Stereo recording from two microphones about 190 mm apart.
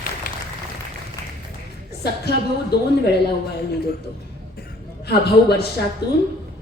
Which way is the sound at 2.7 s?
60° left (ahead or behind).